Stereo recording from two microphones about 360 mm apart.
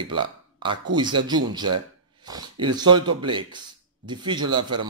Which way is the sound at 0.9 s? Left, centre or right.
Centre.